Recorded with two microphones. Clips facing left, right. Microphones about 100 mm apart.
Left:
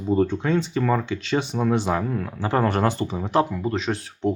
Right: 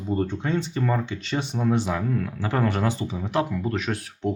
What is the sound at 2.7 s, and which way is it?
Speech, 55° left (ahead or behind).